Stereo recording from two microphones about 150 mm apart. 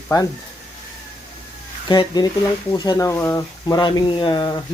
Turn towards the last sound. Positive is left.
turn(degrees=30)  # may be behind; listen again after turning